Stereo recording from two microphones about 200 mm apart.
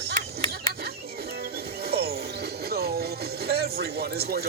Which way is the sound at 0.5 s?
50° right (ahead or behind).